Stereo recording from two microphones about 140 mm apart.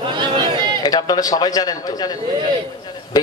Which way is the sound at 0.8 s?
30° left (ahead or behind).